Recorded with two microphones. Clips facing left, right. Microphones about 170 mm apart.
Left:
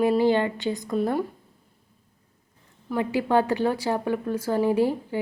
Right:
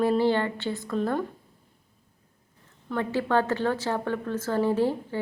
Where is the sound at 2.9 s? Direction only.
10° left (ahead or behind).